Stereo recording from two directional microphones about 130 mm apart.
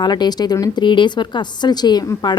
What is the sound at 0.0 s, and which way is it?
A woman's voice, 35° left (ahead or behind).